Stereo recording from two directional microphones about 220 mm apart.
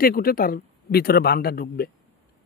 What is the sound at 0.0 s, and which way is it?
A man's voice, 40° left (ahead or behind).